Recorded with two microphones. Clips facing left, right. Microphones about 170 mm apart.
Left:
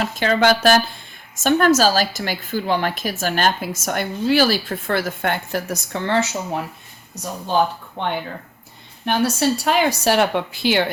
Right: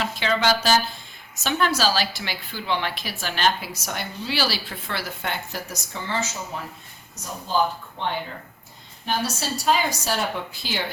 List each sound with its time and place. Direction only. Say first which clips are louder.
0.0 s a woman's voice: left 6 dB; 50° left (ahead or behind); by 10.8 s 65° left (ahead or behind)